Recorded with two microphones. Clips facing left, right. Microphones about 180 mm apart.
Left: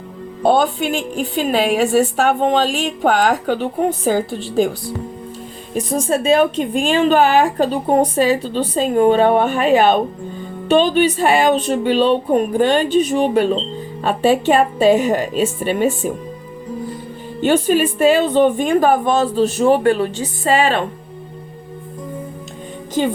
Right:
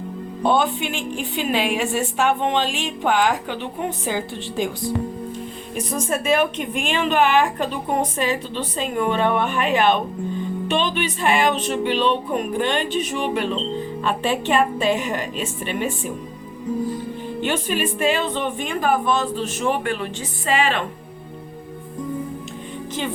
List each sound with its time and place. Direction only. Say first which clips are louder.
0.4 s a woman's voice: left 5 dB; 40° left (ahead or behind)
5.9 s a woman's voice: left 6 dB; 30° left (ahead or behind)
17.4 s a woman's voice: left 9 dB; 40° left (ahead or behind)